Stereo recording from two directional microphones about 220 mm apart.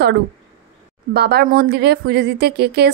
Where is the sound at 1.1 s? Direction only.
45° right (ahead or behind).